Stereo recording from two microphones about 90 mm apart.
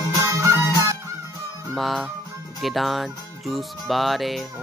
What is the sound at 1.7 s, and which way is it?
Music, centre (ahead or behind).